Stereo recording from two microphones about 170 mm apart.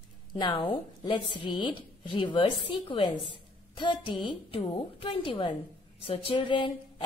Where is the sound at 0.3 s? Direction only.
30° left (ahead or behind).